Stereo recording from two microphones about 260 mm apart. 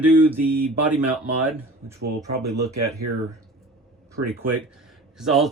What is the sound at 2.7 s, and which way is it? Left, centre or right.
Speech, right.